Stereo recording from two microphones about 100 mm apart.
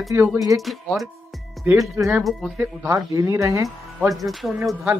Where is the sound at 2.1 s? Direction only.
Centre (ahead or behind).